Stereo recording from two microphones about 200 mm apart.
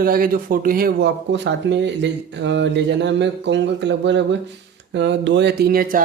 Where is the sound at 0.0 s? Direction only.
45° right (ahead or behind).